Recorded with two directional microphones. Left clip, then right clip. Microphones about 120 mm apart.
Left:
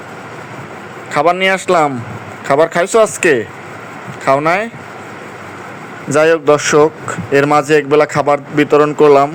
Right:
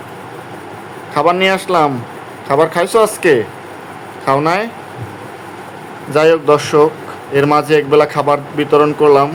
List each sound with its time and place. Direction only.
1.1 s a man's voice: 35° left (ahead or behind)
4.4 s a man's voice: 40° left (ahead or behind)
6.1 s a man's voice: 40° left (ahead or behind)